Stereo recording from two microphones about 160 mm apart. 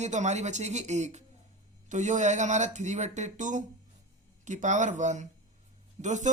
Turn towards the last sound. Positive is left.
turn(degrees=-50)  # may be behind; listen again after turning